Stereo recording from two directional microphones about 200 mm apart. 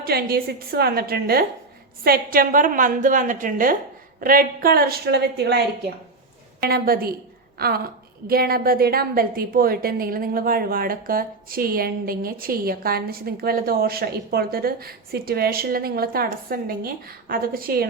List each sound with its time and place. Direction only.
0.0 s a woman's voice: 50° right (ahead or behind)